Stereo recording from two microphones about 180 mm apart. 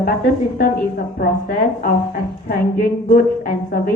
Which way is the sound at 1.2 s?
55° left (ahead or behind).